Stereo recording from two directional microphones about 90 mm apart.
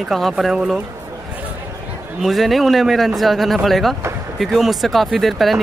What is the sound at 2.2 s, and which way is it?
Speech, centre (ahead or behind).